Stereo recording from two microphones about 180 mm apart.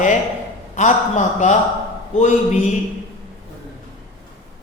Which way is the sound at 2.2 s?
40° left (ahead or behind).